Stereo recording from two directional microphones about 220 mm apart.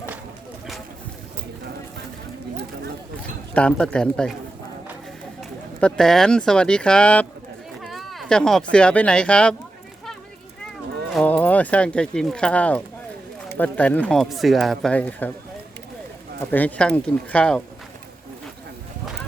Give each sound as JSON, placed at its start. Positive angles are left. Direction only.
{"t": 3.5, "sound": "speech", "side_deg": 5}
{"t": 5.4, "sound": "speech", "side_deg": 0}
{"t": 7.8, "sound": "a sound", "side_deg": 0}
{"t": 8.7, "sound": "speech", "side_deg": 5}
{"t": 11.1, "sound": "speech", "side_deg": 5}
{"t": 16.5, "sound": "speech", "side_deg": 5}